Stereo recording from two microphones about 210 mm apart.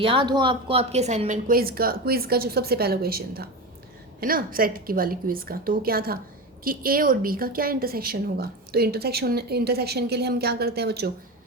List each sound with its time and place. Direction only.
0.0 s speech: 25° right (ahead or behind); by 11.1 s 50° right (ahead or behind)